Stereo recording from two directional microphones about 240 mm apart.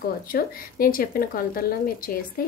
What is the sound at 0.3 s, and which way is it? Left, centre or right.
A woman's voice, left.